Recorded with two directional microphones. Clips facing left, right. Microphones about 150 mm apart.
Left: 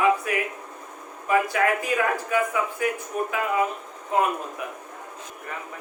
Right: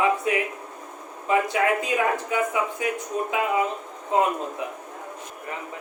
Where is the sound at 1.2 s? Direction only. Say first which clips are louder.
Even; 20° right (ahead or behind).